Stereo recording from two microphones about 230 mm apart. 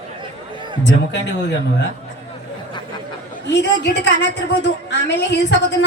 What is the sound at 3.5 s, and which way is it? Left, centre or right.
A woman's voice, left.